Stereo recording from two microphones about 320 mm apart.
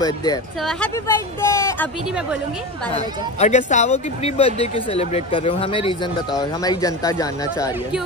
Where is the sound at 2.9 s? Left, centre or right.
Left.